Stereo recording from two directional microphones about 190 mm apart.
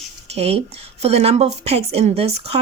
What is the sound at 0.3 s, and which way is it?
Speech, 30° right (ahead or behind).